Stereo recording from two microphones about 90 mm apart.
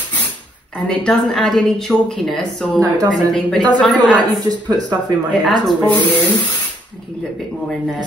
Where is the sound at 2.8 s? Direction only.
40° right (ahead or behind).